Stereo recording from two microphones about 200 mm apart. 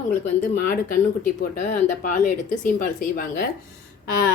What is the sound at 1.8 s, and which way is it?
Speech, 40° left (ahead or behind).